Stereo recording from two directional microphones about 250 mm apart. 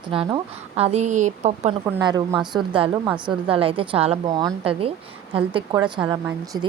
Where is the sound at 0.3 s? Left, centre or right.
Right.